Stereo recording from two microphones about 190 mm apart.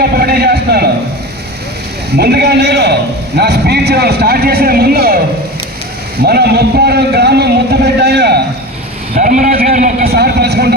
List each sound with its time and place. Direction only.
0.0 s a sound: 55° right (ahead or behind)
2.1 s a man's voice: 60° right (ahead or behind)
6.2 s a man's voice: 60° right (ahead or behind)
9.1 s a man's voice: 45° right (ahead or behind)